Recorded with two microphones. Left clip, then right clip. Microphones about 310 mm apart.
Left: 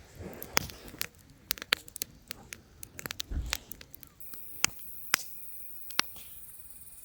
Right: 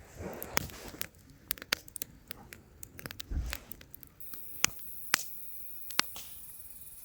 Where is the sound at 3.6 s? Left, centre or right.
Centre.